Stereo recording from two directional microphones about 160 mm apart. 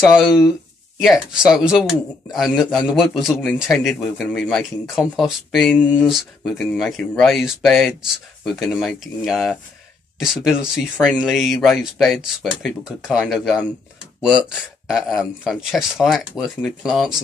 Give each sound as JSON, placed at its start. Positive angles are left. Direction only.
{"t": 0.0, "sound": "speech", "side_deg": 0}